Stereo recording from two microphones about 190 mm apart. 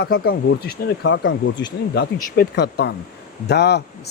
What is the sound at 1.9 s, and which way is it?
Speech, 65° left (ahead or behind).